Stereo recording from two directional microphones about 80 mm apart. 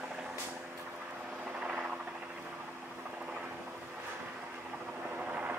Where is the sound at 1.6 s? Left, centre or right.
Centre.